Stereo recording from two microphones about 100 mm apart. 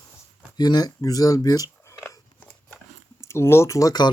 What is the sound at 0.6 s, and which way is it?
Speech, 45° left (ahead or behind).